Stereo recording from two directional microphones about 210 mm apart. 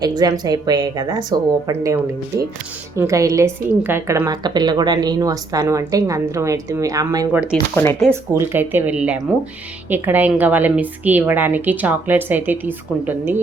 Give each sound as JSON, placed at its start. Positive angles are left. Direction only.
{"t": 0.0, "sound": "a woman's voice", "side_deg": -20}
{"t": 7.5, "sound": "speech", "side_deg": 10}
{"t": 8.1, "sound": "a woman's voice", "side_deg": -10}